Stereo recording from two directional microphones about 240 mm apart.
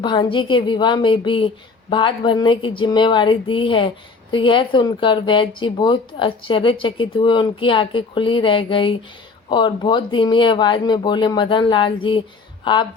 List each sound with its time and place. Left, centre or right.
0.0 s speech: centre